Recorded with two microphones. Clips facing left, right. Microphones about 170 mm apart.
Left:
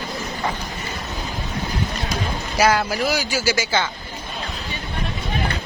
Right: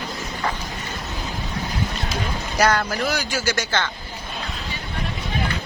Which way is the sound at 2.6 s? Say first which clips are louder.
Left 2 dB; 5° left (ahead or behind).